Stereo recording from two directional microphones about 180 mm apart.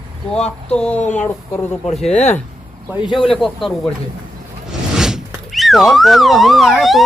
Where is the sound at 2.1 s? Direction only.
40° left (ahead or behind).